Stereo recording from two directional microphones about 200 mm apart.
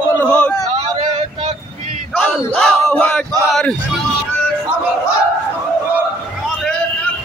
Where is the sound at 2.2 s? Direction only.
5° left (ahead or behind).